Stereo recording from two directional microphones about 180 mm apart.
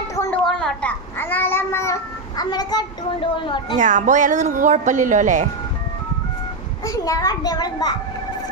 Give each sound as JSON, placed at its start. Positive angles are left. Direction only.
{"t": 0.3, "sound": "a child's voice", "side_deg": 5}
{"t": 3.8, "sound": "speech", "side_deg": -45}
{"t": 6.8, "sound": "a child's voice", "side_deg": 20}